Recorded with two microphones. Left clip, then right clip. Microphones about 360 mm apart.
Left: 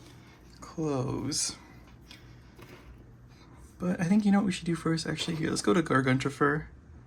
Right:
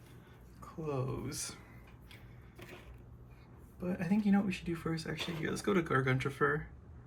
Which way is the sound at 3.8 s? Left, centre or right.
Centre.